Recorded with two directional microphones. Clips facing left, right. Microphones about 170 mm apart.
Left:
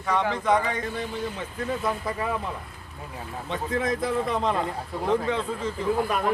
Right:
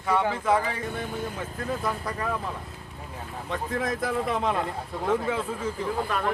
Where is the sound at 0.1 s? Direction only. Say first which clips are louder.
Even; 5° right (ahead or behind).